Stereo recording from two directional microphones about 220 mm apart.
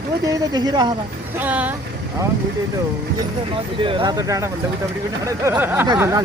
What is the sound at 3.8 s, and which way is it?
Speech, 20° right (ahead or behind).